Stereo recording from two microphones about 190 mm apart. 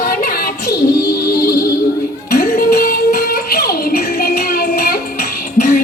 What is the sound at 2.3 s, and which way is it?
Music, 45° left (ahead or behind).